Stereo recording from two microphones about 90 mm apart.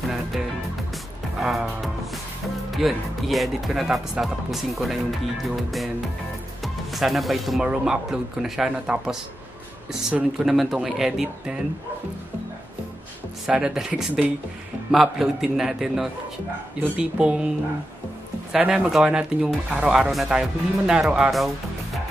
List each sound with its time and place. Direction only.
0.0 s music: centre (ahead or behind)
1.4 s music: centre (ahead or behind)
2.7 s speech: centre (ahead or behind)
13.5 s speech: 10° right (ahead or behind)
18.7 s speech: 5° right (ahead or behind)